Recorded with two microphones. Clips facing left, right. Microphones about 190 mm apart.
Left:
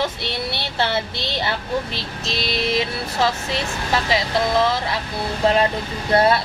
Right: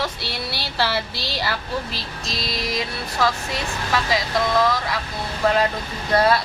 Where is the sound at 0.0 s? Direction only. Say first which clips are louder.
Left 3 dB; 20° left (ahead or behind).